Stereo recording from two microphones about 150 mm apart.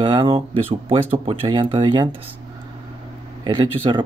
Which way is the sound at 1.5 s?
30° right (ahead or behind).